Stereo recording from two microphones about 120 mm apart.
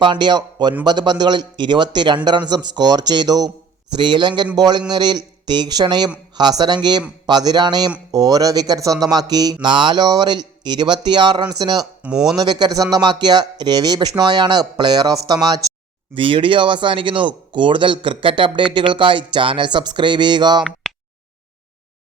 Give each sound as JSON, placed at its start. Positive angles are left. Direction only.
{"t": 0.0, "sound": "speech", "side_deg": -40}
{"t": 12.0, "sound": "speech", "side_deg": -5}
{"t": 12.4, "sound": "speech", "side_deg": -35}
{"t": 16.1, "sound": "speech", "side_deg": -45}